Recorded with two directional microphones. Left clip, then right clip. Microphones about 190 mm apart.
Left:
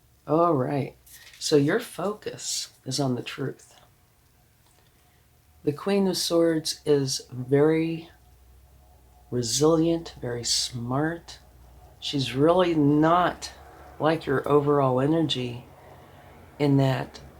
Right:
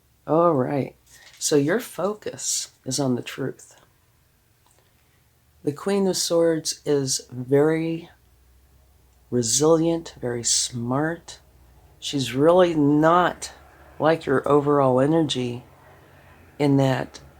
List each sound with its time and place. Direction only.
0.3 s speech: 45° right (ahead or behind)
5.6 s speech: 40° right (ahead or behind)
9.3 s speech: 50° right (ahead or behind)
16.6 s speech: 45° right (ahead or behind)